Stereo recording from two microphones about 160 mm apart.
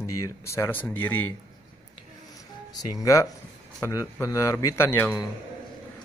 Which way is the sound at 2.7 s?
20° left (ahead or behind).